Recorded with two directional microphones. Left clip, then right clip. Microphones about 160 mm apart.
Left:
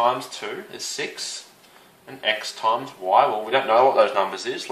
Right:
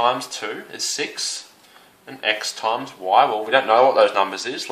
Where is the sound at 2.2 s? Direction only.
35° right (ahead or behind).